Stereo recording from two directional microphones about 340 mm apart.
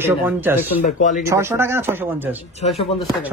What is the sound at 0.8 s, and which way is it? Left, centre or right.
Speech, left.